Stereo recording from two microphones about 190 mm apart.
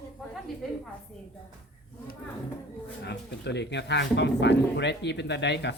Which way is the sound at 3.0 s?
60° left (ahead or behind).